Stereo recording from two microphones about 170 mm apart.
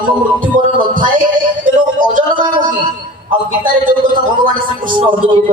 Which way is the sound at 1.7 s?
50° right (ahead or behind).